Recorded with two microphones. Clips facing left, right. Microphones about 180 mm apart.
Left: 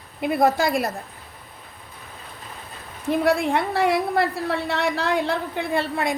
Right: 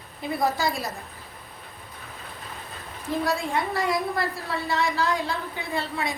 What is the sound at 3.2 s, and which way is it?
A woman's voice, 65° left (ahead or behind).